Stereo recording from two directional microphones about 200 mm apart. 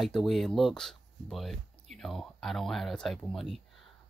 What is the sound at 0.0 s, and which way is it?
Speech, centre (ahead or behind).